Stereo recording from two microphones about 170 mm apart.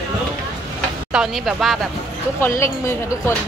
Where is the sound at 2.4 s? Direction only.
15° left (ahead or behind).